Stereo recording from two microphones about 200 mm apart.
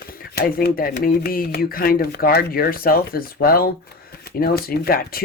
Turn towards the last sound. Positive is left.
turn(degrees=50)  # may be behind; listen again after turning